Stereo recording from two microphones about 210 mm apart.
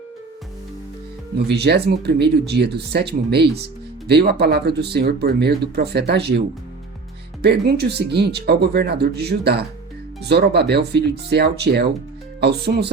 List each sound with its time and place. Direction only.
1.5 s speech: 50° right (ahead or behind)
7.4 s speech: 50° right (ahead or behind)